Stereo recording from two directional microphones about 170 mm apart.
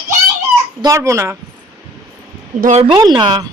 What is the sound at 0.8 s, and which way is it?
Speech, 20° right (ahead or behind).